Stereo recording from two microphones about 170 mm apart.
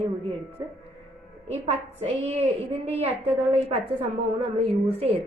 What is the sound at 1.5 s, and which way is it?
A woman's voice, 40° right (ahead or behind).